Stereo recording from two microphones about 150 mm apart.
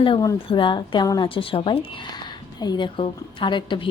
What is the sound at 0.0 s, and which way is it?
Speech, 35° left (ahead or behind).